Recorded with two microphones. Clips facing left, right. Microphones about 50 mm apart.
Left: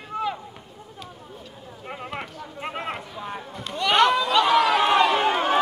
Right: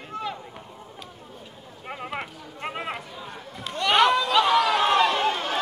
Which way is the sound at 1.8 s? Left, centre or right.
Centre.